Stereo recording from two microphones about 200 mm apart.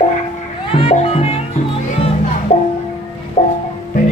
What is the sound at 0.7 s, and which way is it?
Music, 30° left (ahead or behind).